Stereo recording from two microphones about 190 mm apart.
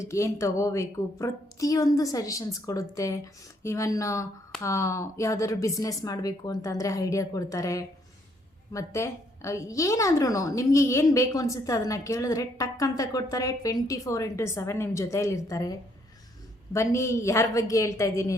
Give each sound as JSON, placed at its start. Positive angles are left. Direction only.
{"t": 0.0, "sound": "a woman's voice", "side_deg": 15}
{"t": 16.7, "sound": "a woman's voice", "side_deg": 15}